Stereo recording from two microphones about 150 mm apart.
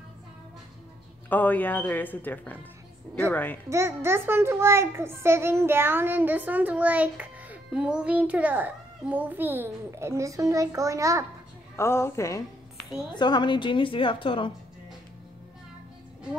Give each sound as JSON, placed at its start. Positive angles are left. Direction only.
{"t": 1.3, "sound": "speech", "side_deg": 10}
{"t": 3.6, "sound": "a child's voice", "side_deg": -20}
{"t": 11.7, "sound": "a woman's voice", "side_deg": 15}